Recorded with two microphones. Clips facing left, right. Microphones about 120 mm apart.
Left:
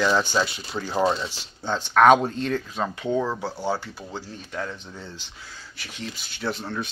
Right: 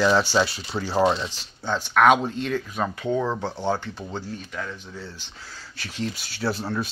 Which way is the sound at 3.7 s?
5° left (ahead or behind).